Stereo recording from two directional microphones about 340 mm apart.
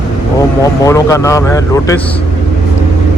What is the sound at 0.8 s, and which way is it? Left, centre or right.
Speech, centre.